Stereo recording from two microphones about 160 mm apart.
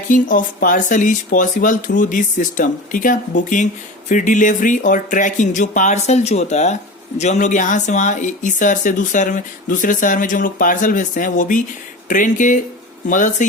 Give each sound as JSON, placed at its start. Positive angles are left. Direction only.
{"t": 0.1, "sound": "speech", "side_deg": 55}